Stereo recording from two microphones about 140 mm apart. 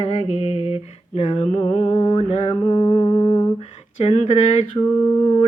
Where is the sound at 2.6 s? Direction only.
35° left (ahead or behind).